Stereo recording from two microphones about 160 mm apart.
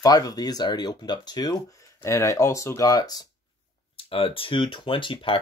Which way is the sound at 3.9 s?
35° left (ahead or behind).